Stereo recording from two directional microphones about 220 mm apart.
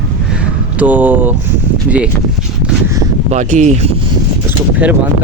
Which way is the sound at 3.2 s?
30° right (ahead or behind).